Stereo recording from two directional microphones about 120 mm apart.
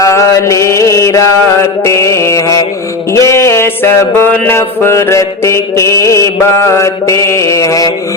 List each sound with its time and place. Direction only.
0.0 s mantra: 25° left (ahead or behind)